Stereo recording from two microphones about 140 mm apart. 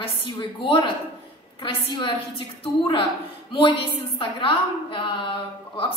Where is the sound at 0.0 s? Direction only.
40° left (ahead or behind).